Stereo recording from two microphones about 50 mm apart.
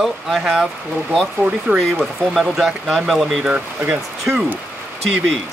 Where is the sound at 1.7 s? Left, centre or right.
Centre.